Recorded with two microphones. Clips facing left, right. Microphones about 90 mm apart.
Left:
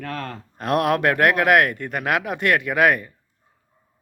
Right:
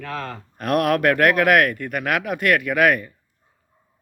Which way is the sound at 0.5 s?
25° left (ahead or behind).